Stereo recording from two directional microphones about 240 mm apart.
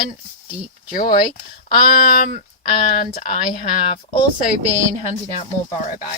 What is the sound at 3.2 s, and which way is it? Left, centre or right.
Speech, left.